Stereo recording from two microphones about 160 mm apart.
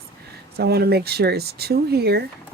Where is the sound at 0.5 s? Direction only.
85° right.